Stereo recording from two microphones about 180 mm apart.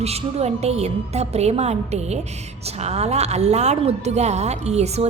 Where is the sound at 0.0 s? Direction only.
35° right (ahead or behind).